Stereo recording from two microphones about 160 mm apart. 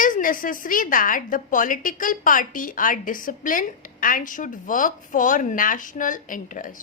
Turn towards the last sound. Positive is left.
turn(degrees=55)  # may be behind; listen again after turning